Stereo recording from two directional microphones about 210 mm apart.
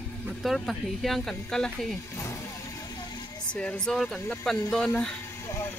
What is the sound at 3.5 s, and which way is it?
Speech, 5° left (ahead or behind).